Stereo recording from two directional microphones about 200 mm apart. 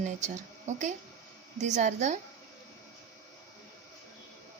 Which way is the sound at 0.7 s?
35° right (ahead or behind).